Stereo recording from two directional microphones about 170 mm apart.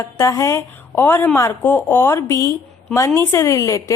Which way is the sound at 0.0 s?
15° left (ahead or behind).